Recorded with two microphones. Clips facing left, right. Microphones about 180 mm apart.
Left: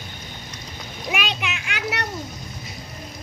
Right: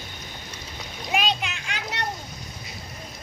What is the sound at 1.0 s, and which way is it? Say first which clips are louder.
Splash: right 1 dB; 70° left (ahead or behind).